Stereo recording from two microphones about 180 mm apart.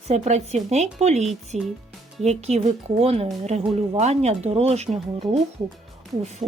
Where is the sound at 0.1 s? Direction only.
35° right (ahead or behind).